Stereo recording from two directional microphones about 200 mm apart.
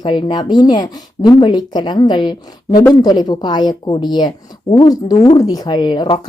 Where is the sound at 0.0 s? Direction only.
25° left (ahead or behind).